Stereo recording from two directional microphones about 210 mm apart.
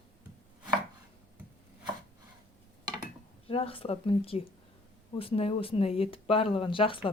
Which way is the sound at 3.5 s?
25° left (ahead or behind).